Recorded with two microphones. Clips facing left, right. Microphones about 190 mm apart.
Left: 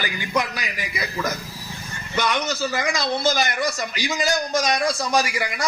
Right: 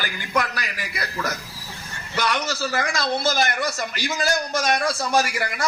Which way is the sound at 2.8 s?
15° left (ahead or behind).